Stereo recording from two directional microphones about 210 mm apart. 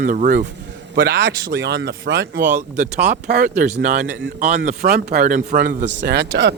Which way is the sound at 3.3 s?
50° right (ahead or behind).